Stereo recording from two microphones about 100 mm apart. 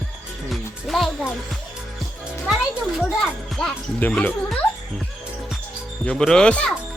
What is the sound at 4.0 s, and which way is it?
Speech, 15° left (ahead or behind).